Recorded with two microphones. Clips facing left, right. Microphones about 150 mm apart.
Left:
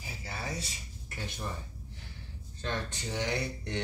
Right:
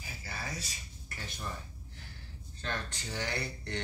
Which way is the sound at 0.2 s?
25° left (ahead or behind).